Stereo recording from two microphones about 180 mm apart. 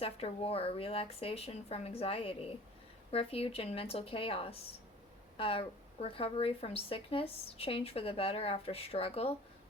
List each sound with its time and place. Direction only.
0.0 s a woman's voice: 35° left (ahead or behind)